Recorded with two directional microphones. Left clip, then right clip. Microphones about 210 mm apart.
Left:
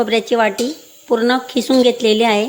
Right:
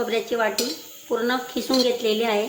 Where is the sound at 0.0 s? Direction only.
40° left (ahead or behind).